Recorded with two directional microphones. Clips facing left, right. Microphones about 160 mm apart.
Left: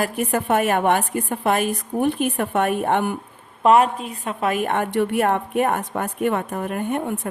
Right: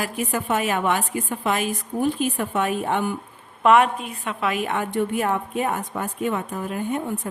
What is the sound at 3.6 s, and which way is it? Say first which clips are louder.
A woman's voice: left 1 dB; 35° left (ahead or behind).